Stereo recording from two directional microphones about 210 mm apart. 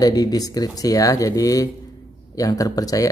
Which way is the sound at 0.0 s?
15° left (ahead or behind).